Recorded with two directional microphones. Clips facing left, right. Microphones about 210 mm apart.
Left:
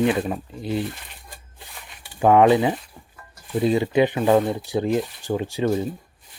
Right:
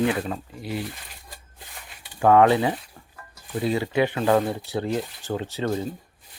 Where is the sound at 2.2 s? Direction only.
15° left (ahead or behind).